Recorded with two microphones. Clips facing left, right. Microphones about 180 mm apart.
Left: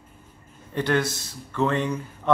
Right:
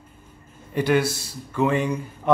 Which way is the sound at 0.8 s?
10° right (ahead or behind).